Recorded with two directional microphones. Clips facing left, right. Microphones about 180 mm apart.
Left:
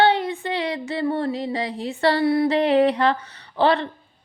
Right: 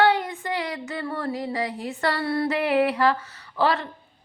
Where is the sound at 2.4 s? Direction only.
30° left (ahead or behind).